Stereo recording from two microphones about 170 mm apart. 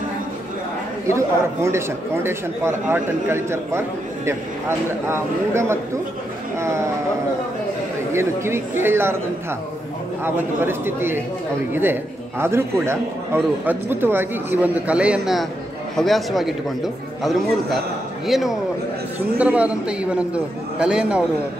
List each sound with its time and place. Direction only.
1.0 s a man's voice: 15° right (ahead or behind)
8.1 s a man's voice: 15° right (ahead or behind)
10.2 s a man's voice: 15° right (ahead or behind)